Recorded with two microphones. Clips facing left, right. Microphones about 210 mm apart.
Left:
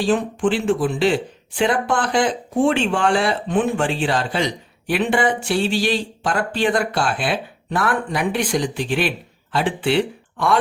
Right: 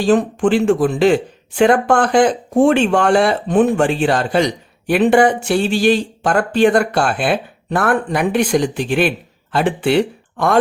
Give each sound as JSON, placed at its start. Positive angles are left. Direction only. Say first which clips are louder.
{"t": 0.0, "sound": "speech", "louder": "right 5 dB", "side_deg": -45}